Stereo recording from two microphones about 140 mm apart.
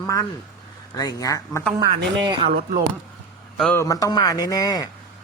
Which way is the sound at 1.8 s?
30° right (ahead or behind).